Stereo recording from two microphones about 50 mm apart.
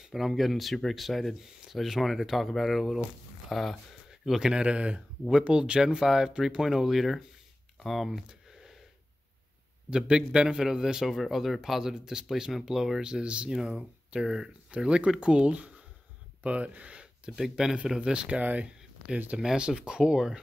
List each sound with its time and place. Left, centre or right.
0.1 s a man's voice: centre
8.3 s a sound: centre
9.8 s a man's voice: centre
13.0 s a man's voice: centre
14.7 s speech: right
17.4 s a man's voice: centre